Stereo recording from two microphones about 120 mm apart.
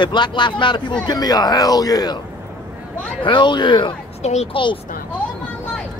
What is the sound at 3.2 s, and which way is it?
Speech, 40° left (ahead or behind).